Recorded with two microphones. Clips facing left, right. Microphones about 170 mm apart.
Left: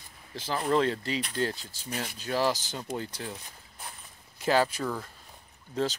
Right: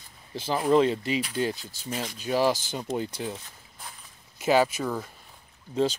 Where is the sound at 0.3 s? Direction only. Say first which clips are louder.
Right 5 dB; 20° right (ahead or behind).